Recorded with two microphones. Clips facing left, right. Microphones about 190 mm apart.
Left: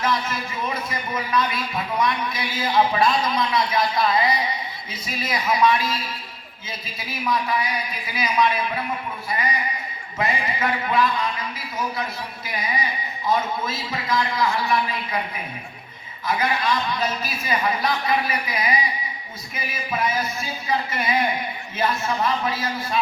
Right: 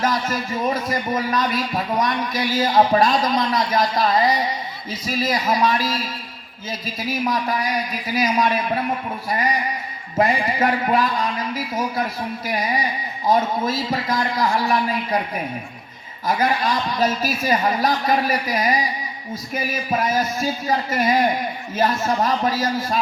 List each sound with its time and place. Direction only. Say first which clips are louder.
0.0 s speech: right 3 dB; 40° right (ahead or behind)
10.2 s speech: right 6 dB; 45° right (ahead or behind)
13.2 s speech: right 4 dB; 40° right (ahead or behind)
16.2 s speech: right 3 dB; 40° right (ahead or behind)